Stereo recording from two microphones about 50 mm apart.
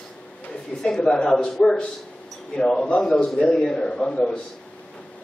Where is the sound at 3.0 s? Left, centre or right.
Centre.